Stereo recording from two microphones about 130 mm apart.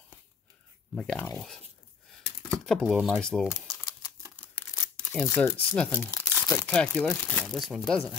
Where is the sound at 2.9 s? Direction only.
5° right (ahead or behind).